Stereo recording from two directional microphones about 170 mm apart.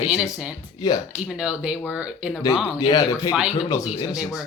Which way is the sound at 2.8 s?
20° left (ahead or behind).